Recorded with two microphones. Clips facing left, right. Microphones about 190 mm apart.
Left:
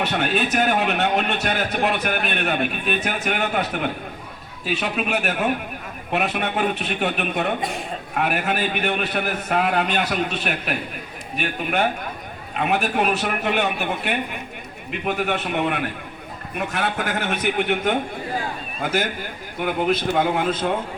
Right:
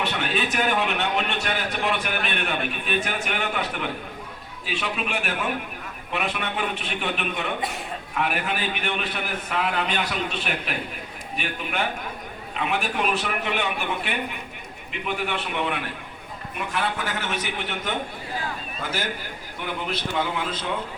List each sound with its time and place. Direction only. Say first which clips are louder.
0.0 s a man's voice: left 4 dB; 45° left (ahead or behind)